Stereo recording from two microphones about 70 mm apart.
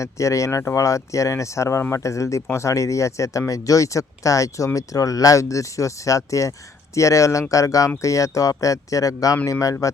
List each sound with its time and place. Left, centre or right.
0.0 s speech: left